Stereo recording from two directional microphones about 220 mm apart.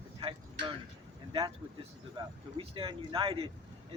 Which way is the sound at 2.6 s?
25° right (ahead or behind).